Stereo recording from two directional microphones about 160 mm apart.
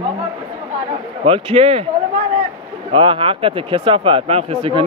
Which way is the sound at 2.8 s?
30° right (ahead or behind).